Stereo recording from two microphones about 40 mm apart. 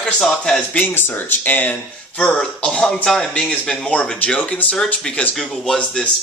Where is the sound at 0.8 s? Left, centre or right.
Left.